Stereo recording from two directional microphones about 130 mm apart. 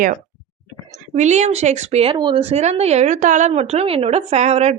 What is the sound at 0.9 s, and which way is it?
A woman's voice, 65° right (ahead or behind).